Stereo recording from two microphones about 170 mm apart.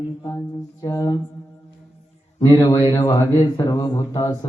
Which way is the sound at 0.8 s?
20° left (ahead or behind).